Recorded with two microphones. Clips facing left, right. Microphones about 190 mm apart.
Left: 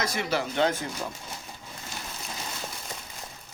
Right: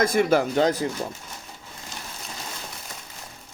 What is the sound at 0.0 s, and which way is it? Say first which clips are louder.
Speech: right 9 dB; 50° right (ahead or behind).